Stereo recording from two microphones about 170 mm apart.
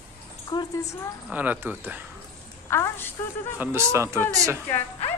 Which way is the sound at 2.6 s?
15° left (ahead or behind).